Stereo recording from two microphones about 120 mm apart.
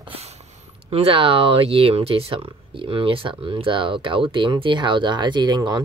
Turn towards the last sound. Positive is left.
turn(degrees=-35)  # may be behind; listen again after turning